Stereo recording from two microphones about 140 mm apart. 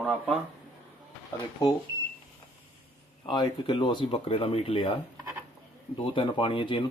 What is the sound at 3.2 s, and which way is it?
Speech, 35° left (ahead or behind).